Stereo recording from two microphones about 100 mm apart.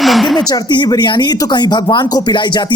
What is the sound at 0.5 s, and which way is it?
Speech, 45° left (ahead or behind).